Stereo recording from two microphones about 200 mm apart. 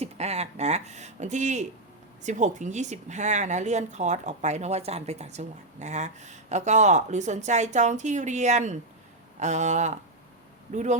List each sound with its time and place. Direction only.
0.0 s speech: 35° right (ahead or behind)